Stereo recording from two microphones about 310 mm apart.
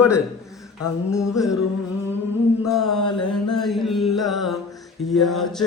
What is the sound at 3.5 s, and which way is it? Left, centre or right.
Music, centre.